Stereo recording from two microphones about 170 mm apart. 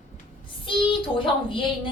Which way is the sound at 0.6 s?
30° left (ahead or behind).